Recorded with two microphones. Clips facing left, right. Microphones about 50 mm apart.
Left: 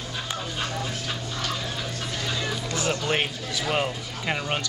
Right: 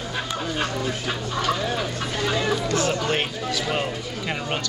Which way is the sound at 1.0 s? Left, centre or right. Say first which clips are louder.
Right 6 dB; right.